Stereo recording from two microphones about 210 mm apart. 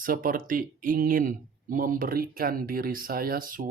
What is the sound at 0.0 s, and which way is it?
Speech, 40° right (ahead or behind).